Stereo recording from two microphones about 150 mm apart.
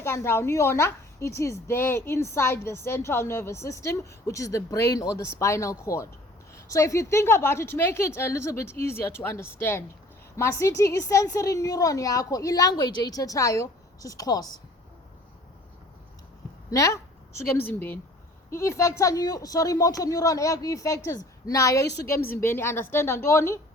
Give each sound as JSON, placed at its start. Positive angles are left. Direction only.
{"t": 0.0, "sound": "a woman's voice", "side_deg": 15}
{"t": 16.7, "sound": "a woman's voice", "side_deg": 20}